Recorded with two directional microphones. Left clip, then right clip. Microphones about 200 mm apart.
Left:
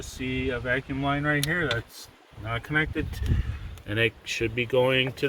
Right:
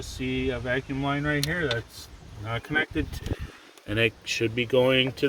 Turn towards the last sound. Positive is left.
turn(degrees=-15)  # may be behind; listen again after turning